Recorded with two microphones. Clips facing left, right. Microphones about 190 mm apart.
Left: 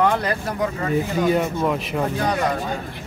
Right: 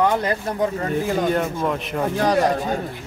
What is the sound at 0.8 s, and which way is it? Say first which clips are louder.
Speech: left 4 dB; 50° right (ahead or behind).